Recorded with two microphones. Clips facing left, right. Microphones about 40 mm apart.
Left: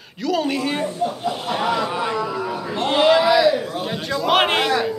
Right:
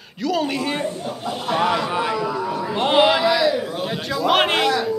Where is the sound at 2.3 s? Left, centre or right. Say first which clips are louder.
Right 1 dB; centre.